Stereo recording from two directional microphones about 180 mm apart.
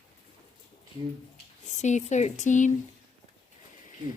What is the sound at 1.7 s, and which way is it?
Speech, 40° left (ahead or behind).